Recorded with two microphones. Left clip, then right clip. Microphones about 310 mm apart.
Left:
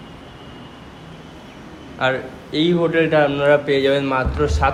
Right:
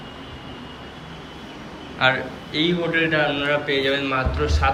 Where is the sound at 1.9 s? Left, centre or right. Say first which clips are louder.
Right 1 dB; centre.